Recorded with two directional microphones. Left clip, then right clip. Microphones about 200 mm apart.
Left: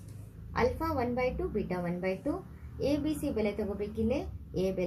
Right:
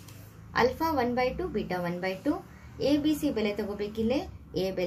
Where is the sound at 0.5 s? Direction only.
15° right (ahead or behind).